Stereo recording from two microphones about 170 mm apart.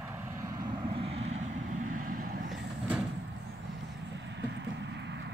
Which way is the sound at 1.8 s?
55° right (ahead or behind).